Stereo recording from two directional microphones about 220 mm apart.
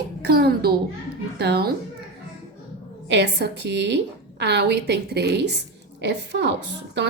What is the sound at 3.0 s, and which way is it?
A woman's voice, 50° right (ahead or behind).